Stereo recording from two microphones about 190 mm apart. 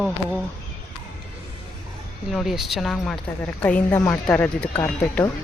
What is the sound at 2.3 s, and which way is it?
Speech, centre (ahead or behind).